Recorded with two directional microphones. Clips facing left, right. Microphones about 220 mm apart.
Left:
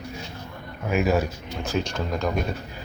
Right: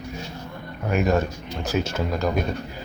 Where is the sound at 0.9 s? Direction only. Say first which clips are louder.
Right 1 dB; 5° left (ahead or behind).